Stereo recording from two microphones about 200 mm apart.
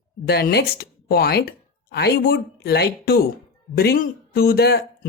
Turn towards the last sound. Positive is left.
turn(degrees=50)  # may be behind; listen again after turning